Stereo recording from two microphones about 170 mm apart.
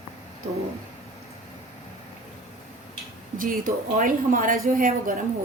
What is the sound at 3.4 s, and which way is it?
A woman's voice, 55° right (ahead or behind).